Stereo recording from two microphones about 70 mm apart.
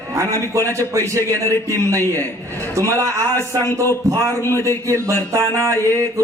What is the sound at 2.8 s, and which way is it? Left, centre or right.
Speech, right.